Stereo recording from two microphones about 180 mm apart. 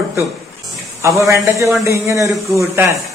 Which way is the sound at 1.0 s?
15° right (ahead or behind).